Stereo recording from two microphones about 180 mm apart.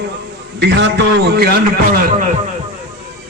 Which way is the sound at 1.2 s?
60° right (ahead or behind).